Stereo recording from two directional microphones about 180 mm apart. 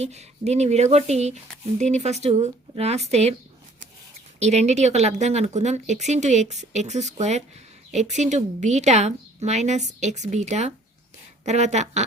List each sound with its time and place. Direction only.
0.0 s speech: 40° right (ahead or behind)
4.4 s speech: 40° right (ahead or behind)